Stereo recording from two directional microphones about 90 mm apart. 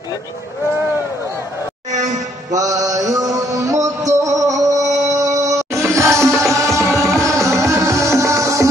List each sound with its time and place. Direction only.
2.5 s music: 40° right (ahead or behind)